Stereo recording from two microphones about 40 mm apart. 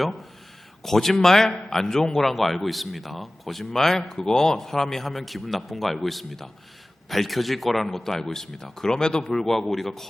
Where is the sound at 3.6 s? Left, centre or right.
Centre.